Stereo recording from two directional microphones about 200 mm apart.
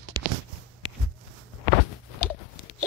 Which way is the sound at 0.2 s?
20° right (ahead or behind).